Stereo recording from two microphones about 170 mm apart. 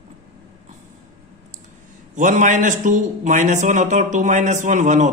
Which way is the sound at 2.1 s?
50° right (ahead or behind).